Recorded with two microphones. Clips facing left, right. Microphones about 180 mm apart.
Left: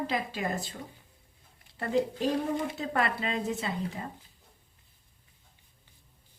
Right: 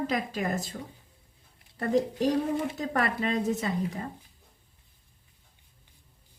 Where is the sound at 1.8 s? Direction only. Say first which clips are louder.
Right 2 dB; 40° right (ahead or behind).